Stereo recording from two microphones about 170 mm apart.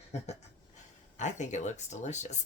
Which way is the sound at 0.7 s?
45° left (ahead or behind).